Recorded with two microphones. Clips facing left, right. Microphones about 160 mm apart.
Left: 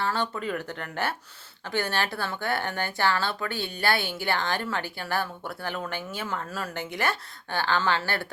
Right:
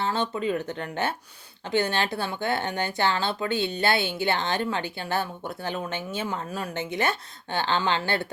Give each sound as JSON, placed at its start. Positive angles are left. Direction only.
{"t": 0.0, "sound": "a woman's voice", "side_deg": -20}